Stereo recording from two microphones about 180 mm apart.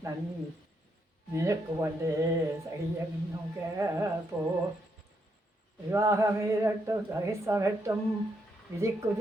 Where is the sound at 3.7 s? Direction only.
15° right (ahead or behind).